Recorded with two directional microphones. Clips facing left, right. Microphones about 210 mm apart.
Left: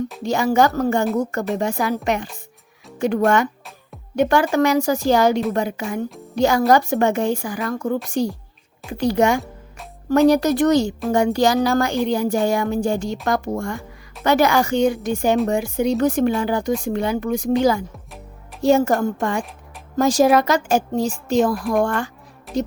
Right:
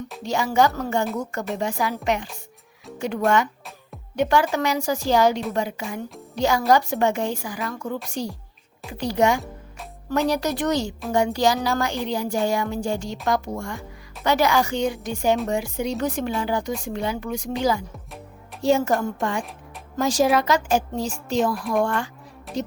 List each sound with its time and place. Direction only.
0.3 s a woman's voice: 50° left (ahead or behind)
4.1 s a woman's voice: 50° left (ahead or behind)
18.6 s a woman's voice: 45° left (ahead or behind)
22.5 s speech: centre (ahead or behind)